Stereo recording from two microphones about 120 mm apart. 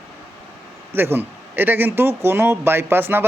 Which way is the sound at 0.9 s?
20° right (ahead or behind).